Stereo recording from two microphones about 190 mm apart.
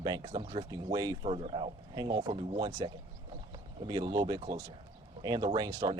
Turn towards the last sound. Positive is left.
turn(degrees=-20)  # may be behind; listen again after turning